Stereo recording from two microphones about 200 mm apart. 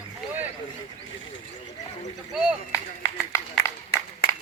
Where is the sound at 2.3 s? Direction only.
Centre (ahead or behind).